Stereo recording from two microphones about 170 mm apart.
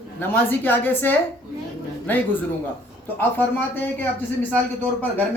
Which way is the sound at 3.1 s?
10° left (ahead or behind).